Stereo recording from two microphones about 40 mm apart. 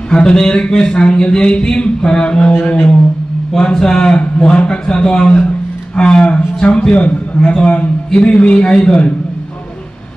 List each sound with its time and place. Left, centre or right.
0.1 s a man's voice: centre